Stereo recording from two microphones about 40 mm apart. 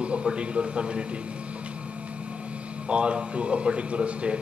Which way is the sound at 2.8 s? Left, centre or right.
Right.